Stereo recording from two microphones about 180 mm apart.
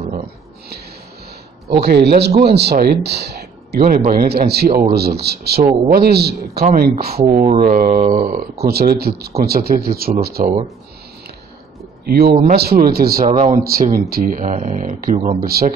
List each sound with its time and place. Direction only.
1.7 s speech: 65° right (ahead or behind)
5.6 s speech: 55° right (ahead or behind)
7.2 s mantra: 35° right (ahead or behind)
7.6 s mantra: 50° right (ahead or behind)
8.6 s speech: 60° right (ahead or behind)
12.0 s speech: 60° right (ahead or behind)
13.3 s speech: 25° right (ahead or behind)
13.8 s speech: 55° right (ahead or behind)